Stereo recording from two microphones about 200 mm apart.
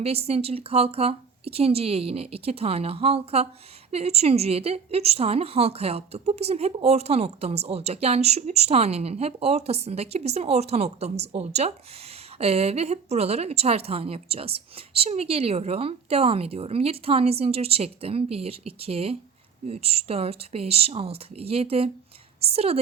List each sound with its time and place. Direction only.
0.0 s a woman's voice: 30° right (ahead or behind)